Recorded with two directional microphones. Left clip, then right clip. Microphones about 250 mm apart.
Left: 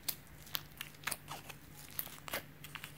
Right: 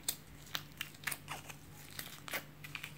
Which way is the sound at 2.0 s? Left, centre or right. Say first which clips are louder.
Right 1 dB; centre.